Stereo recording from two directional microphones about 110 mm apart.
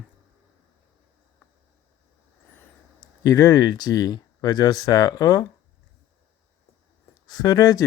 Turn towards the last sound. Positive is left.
turn(degrees=35)  # may be behind; listen again after turning